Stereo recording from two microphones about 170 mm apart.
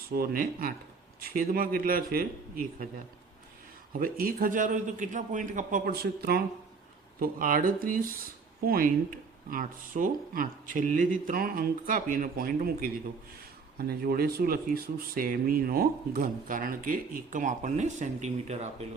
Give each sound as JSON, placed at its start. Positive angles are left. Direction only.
{"t": 0.1, "sound": "speech", "side_deg": -60}
{"t": 4.0, "sound": "a man's voice", "side_deg": -60}